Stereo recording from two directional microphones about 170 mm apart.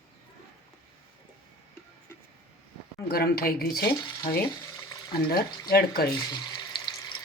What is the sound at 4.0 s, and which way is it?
Speech, 25° left (ahead or behind).